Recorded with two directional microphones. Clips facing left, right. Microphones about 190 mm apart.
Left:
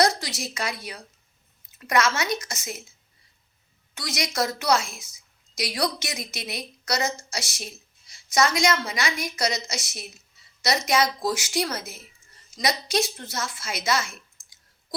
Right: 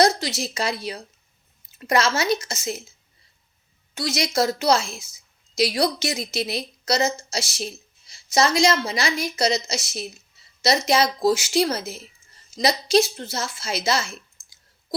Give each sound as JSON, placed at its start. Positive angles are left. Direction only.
{"t": 0.0, "sound": "a woman's voice", "side_deg": -25}
{"t": 3.9, "sound": "a woman's voice", "side_deg": -25}